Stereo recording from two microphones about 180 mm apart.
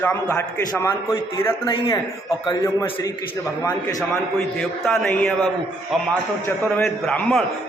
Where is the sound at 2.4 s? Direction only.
25° left (ahead or behind).